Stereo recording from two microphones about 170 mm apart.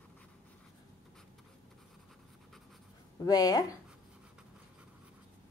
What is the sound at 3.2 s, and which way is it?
Speech, 20° left (ahead or behind).